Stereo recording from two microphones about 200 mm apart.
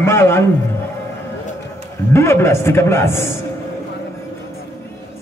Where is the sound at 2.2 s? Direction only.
15° left (ahead or behind).